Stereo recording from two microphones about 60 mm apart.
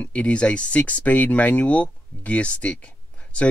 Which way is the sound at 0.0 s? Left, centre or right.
Left.